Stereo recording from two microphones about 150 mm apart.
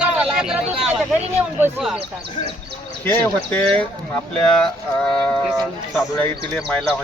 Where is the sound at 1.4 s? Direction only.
15° right (ahead or behind).